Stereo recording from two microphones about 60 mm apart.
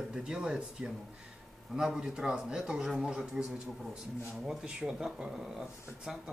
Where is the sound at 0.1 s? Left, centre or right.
Centre.